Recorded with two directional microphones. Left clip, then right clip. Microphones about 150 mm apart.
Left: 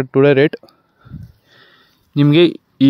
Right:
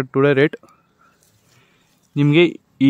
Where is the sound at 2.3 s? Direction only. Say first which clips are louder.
Left 2 dB; 25° left (ahead or behind).